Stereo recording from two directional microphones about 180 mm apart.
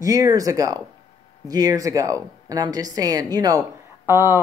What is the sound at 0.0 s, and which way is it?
A woman's voice, 20° right (ahead or behind).